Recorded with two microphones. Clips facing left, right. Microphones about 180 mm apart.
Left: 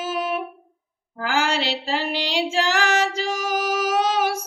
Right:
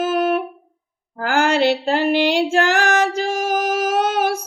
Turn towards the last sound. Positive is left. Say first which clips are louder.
# right 2 dB
turn(degrees=-55)  # may be behind; listen again after turning